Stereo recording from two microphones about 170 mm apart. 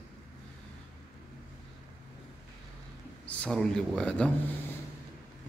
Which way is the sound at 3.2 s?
5° left (ahead or behind).